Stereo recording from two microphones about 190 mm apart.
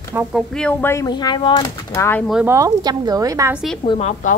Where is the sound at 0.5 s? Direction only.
10° left (ahead or behind); by 1.6 s 25° left (ahead or behind).